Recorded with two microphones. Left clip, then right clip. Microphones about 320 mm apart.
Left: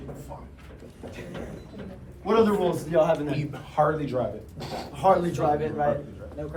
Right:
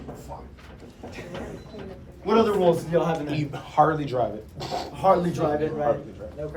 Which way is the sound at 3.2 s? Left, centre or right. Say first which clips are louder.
Right 1 dB; right.